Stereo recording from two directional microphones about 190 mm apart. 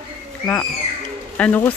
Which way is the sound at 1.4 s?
10° left (ahead or behind).